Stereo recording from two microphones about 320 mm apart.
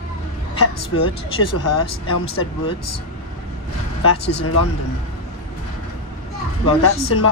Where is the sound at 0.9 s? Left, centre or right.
Left.